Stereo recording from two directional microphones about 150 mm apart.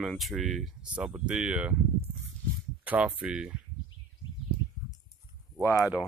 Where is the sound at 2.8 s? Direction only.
10° right (ahead or behind).